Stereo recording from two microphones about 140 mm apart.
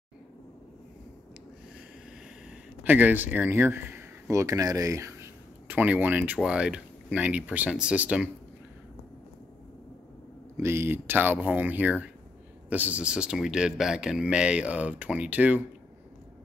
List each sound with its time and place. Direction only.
2.8 s speech: 10° right (ahead or behind)
5.7 s speech: 10° right (ahead or behind)
10.6 s speech: 20° right (ahead or behind)